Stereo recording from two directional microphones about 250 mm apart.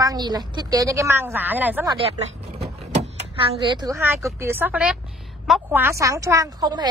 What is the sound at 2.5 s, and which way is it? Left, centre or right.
A woman's voice, right.